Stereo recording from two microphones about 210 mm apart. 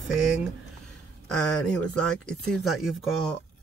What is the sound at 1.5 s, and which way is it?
Speech, 5° left (ahead or behind).